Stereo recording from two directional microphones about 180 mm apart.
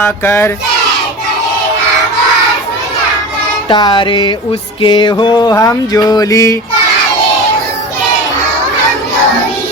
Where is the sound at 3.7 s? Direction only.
25° left (ahead or behind).